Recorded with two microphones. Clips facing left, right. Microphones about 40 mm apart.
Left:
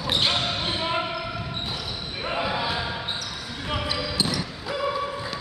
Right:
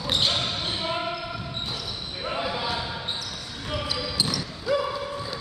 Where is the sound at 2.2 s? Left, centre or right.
Centre.